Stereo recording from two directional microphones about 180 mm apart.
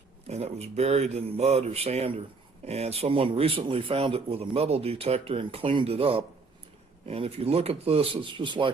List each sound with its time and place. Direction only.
0.3 s speech: 35° right (ahead or behind)